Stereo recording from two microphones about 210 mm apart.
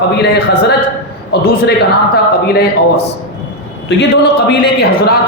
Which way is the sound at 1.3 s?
50° left (ahead or behind).